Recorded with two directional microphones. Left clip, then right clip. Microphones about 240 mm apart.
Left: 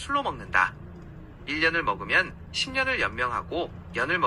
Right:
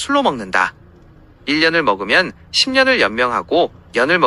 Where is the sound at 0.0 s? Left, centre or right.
Right.